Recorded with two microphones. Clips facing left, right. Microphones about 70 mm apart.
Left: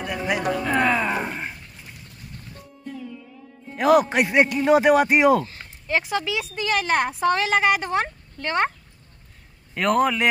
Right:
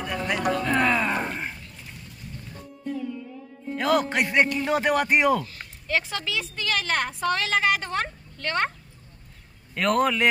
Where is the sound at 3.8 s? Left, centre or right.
Centre.